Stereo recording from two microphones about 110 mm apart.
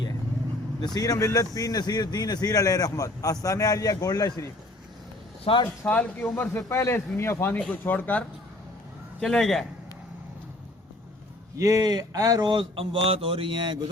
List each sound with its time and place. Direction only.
0.9 s speech: 35° left (ahead or behind)
5.6 s speech: 15° left (ahead or behind)
9.2 s a man's voice: 5° left (ahead or behind)
11.5 s speech: 30° right (ahead or behind); by 13.7 s 45° right (ahead or behind)